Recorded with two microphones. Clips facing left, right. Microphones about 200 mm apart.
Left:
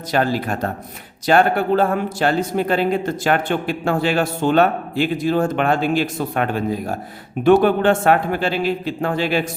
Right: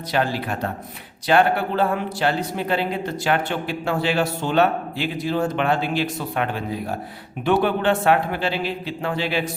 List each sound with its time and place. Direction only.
0.1 s speech: 45° left (ahead or behind)